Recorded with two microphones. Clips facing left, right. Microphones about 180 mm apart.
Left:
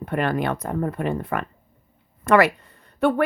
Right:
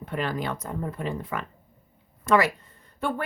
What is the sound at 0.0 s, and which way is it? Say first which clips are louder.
A woman's voice: left 6 dB; 60° left (ahead or behind).